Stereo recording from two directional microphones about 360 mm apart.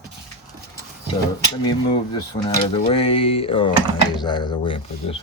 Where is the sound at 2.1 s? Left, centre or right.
Centre.